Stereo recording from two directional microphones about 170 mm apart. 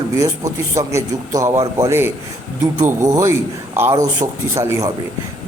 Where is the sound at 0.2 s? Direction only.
20° right (ahead or behind).